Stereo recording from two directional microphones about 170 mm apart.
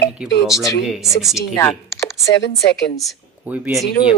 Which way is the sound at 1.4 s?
15° left (ahead or behind).